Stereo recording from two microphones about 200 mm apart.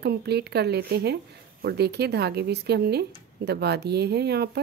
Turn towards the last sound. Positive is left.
turn(degrees=-55)  # may be behind; listen again after turning